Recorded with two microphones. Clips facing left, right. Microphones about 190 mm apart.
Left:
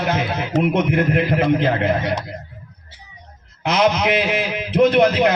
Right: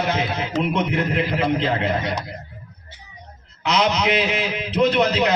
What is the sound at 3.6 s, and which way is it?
A man's voice, 55° left (ahead or behind).